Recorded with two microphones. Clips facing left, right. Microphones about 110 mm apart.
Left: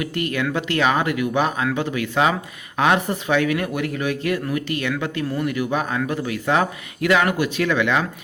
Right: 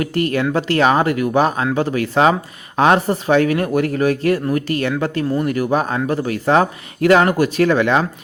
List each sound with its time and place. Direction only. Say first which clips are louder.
0.0 s speech: right 5 dB; 40° right (ahead or behind)